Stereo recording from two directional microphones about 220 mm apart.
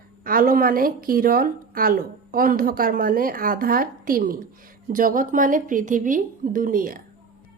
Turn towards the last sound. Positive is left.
turn(degrees=-40)  # may be behind; listen again after turning